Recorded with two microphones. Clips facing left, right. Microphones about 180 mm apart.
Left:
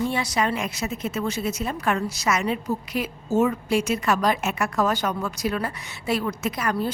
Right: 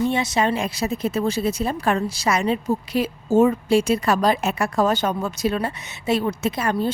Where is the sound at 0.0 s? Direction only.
25° right (ahead or behind).